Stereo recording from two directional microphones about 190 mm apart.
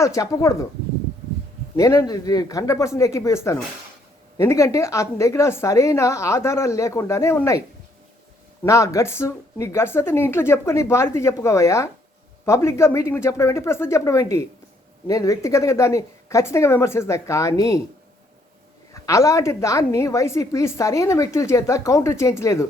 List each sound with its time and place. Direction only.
0.0 s a woman's voice: 15° left (ahead or behind)
1.7 s a woman's voice: 15° left (ahead or behind)
8.6 s a woman's voice: 15° left (ahead or behind)
19.0 s a woman's voice: 15° left (ahead or behind)